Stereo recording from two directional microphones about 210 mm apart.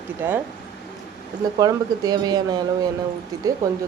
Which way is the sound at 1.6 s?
20° right (ahead or behind).